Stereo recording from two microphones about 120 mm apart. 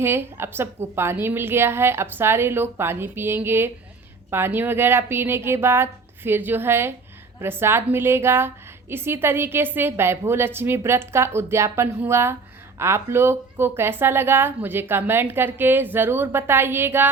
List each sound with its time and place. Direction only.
0.0 s a woman's voice: 20° right (ahead or behind)